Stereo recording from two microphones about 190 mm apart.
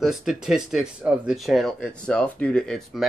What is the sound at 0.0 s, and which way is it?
Speech, centre (ahead or behind).